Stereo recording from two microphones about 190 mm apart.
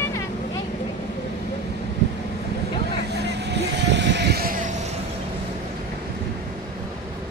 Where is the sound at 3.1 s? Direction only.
60° right (ahead or behind).